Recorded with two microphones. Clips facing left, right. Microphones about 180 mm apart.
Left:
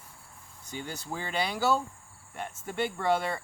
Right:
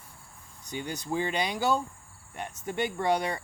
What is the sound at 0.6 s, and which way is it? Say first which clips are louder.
Speech: right 4 dB; 15° right (ahead or behind).